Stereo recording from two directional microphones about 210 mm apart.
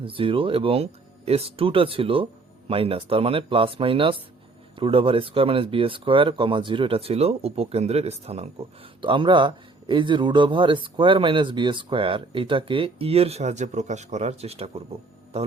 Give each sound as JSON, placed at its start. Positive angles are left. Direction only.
{"t": 0.0, "sound": "speech", "side_deg": -25}